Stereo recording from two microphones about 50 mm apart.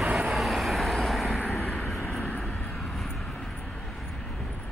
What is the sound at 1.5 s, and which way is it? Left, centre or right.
Vehicle, left.